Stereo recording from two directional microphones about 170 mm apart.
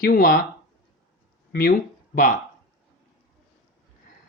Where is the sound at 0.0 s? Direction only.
55° left (ahead or behind).